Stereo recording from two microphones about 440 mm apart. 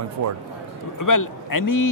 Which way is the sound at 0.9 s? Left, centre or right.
Left.